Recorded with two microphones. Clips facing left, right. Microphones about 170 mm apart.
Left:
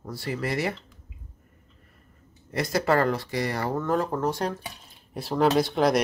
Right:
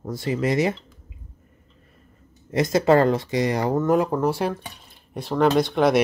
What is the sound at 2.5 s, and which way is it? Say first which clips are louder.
Speech: right 6 dB; 20° right (ahead or behind).